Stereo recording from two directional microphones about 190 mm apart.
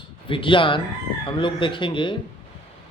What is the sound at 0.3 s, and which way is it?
Speech, 25° left (ahead or behind).